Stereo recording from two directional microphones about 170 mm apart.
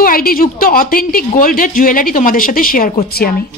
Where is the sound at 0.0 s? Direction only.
60° left (ahead or behind).